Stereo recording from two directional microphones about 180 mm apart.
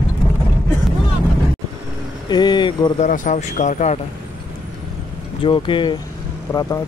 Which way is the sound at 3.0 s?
45° left (ahead or behind).